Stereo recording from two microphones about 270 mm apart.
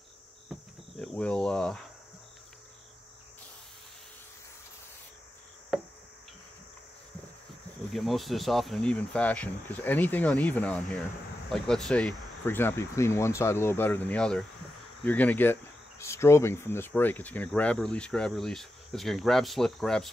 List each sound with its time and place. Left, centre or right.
0.5 s cricket: centre
7.9 s speech: centre